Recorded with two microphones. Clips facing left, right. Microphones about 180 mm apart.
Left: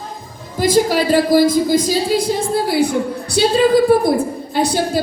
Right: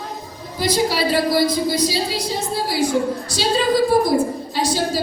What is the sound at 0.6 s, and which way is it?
A woman's voice, 45° left (ahead or behind).